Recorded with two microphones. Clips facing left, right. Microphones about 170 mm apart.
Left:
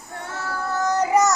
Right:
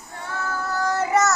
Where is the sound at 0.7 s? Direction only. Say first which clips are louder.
Left 2 dB; 20° left (ahead or behind).